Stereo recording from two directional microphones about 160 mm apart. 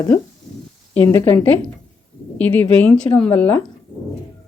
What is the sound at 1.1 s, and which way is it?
Speech, 15° left (ahead or behind).